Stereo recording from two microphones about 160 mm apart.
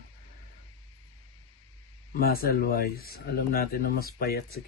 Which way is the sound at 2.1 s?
70° left (ahead or behind).